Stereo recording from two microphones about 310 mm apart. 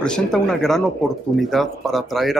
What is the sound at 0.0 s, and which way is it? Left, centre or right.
Speech, centre.